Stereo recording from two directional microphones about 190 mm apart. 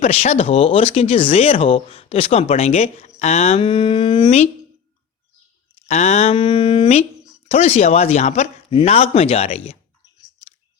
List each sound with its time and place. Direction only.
0.0 s speech: 35° left (ahead or behind)
5.9 s speech: 35° left (ahead or behind)